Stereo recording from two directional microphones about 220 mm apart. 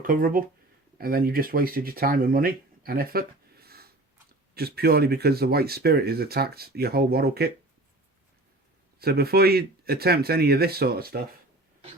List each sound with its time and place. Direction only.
0.0 s speech: 40° right (ahead or behind)
9.0 s speech: 45° right (ahead or behind)